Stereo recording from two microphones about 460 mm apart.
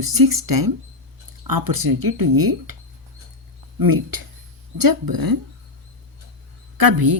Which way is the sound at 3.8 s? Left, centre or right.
Right.